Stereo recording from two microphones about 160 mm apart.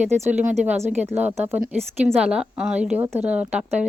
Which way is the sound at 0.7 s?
45° right (ahead or behind).